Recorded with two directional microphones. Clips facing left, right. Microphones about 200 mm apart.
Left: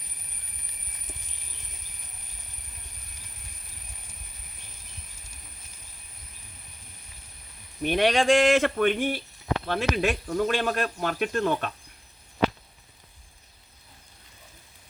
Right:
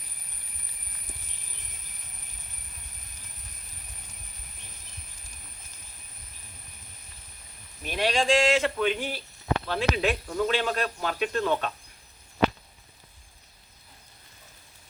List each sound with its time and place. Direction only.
7.8 s speech: 60° left (ahead or behind)